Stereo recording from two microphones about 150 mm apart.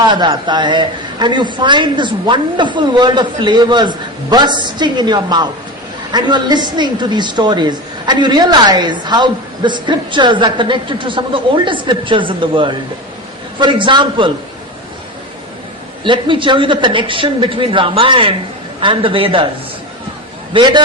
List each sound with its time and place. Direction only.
0.0 s a woman's voice: 30° right (ahead or behind)
16.0 s a woman's voice: 35° right (ahead or behind)
20.5 s a woman's voice: 30° right (ahead or behind)